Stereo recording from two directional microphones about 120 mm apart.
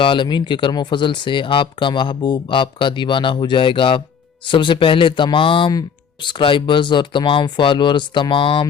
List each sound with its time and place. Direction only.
0.0 s speech: 45° left (ahead or behind)